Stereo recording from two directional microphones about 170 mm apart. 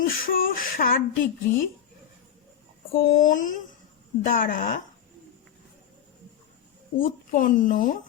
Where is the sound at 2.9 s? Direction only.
60° left (ahead or behind).